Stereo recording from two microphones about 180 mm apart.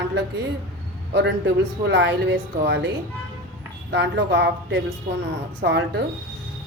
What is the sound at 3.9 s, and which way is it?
Speech, 70° right (ahead or behind).